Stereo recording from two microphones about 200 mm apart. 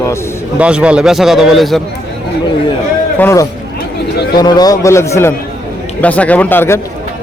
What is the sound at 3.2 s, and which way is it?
A man's voice, 15° left (ahead or behind).